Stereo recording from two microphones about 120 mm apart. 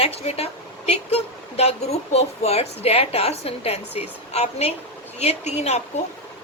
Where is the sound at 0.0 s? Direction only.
55° left (ahead or behind).